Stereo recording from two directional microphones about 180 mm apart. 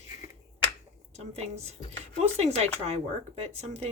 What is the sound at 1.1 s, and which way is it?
Speech, 35° right (ahead or behind).